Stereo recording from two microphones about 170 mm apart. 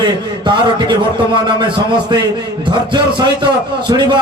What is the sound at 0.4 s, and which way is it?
A man's voice, 25° right (ahead or behind).